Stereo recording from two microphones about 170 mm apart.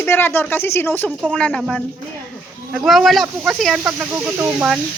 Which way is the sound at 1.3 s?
5° left (ahead or behind).